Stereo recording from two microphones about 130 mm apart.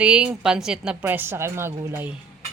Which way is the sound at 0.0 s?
10° right (ahead or behind).